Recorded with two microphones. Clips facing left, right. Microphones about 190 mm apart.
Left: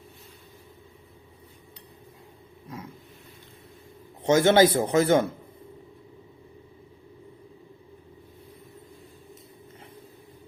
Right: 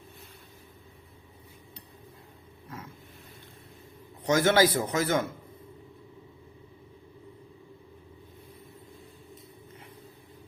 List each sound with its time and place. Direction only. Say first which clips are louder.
2.6 s roaring cats: left 4 dB; 15° left (ahead or behind)
4.2 s a man's voice: left 4 dB; 25° left (ahead or behind)